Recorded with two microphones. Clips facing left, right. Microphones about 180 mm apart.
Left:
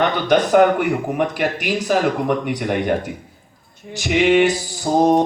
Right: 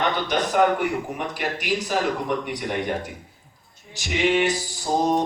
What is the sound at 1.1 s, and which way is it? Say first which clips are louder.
A man's voice: left 8 dB; 60° left (ahead or behind).